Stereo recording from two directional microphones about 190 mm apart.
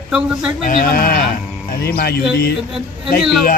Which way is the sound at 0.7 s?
50° left (ahead or behind).